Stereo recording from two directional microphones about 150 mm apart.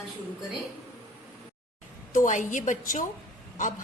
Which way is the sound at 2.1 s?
55° left (ahead or behind).